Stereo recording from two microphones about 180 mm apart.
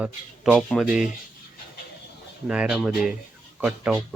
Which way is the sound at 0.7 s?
Centre (ahead or behind).